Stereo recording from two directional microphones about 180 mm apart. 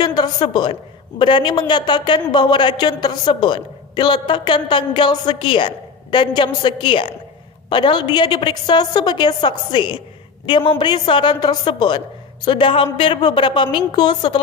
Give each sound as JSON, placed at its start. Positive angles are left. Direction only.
{"t": 0.0, "sound": "a woman's voice", "side_deg": 20}